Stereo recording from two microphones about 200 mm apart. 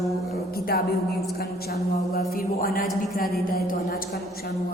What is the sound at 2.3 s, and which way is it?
A woman's voice, 45° left (ahead or behind).